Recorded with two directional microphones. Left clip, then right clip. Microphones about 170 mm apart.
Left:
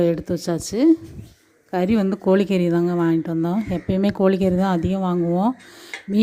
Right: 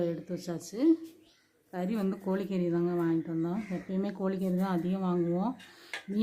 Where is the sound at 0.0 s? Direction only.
45° left (ahead or behind).